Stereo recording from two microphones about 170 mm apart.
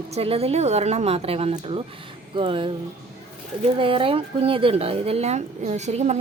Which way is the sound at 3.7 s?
30° right (ahead or behind).